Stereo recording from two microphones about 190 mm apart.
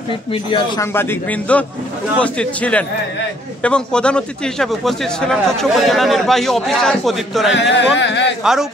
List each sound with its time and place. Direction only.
0.7 s a man's voice: 10° left (ahead or behind)
7.5 s speech: 70° left (ahead or behind)